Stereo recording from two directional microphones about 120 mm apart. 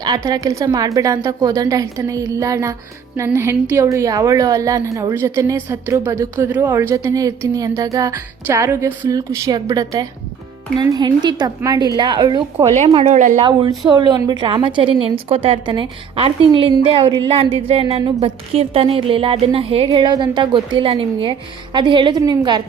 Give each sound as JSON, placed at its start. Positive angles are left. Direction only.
{"t": 0.3, "sound": "a woman's voice", "side_deg": -30}
{"t": 12.7, "sound": "speech", "side_deg": -75}
{"t": 13.1, "sound": "speech", "side_deg": -90}
{"t": 13.4, "sound": "a woman's voice", "side_deg": -40}
{"t": 20.1, "sound": "a woman's voice", "side_deg": -35}